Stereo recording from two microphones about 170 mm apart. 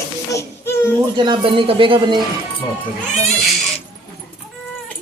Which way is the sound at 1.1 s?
30° right (ahead or behind).